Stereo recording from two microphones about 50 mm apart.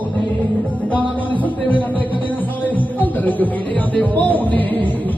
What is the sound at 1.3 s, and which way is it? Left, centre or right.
Music, left.